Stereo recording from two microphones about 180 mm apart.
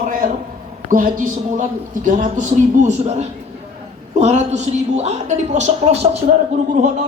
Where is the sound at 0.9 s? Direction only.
50° right (ahead or behind).